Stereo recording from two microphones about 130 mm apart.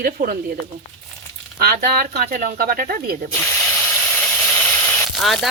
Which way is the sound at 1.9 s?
90° right.